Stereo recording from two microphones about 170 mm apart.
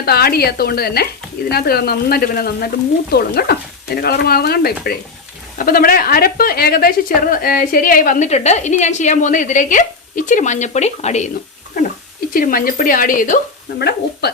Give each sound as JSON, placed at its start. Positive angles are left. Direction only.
{"t": 0.0, "sound": "a woman's voice", "side_deg": 65}
{"t": 8.3, "sound": "speech", "side_deg": 40}
{"t": 12.3, "sound": "a woman's voice", "side_deg": 55}
{"t": 13.7, "sound": "speech", "side_deg": 75}